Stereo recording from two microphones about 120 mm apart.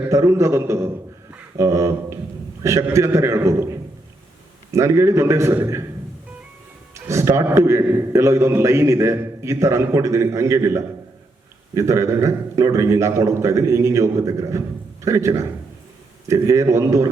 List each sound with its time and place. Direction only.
0.1 s a man's voice: 25° right (ahead or behind)
1.3 s a sound: 25° right (ahead or behind)
2.6 s a man's voice: 25° right (ahead or behind)
6.9 s a man's voice: 25° right (ahead or behind)